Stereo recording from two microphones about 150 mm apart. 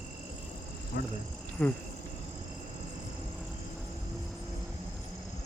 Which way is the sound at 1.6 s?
10° left (ahead or behind).